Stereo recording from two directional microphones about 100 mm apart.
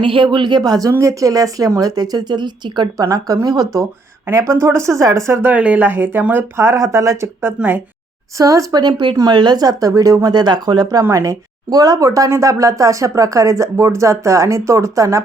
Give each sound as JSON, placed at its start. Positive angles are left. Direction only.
{"t": 0.0, "sound": "speech", "side_deg": -60}